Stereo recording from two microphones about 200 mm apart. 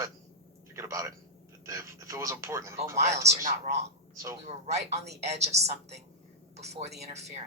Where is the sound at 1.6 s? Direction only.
15° right (ahead or behind).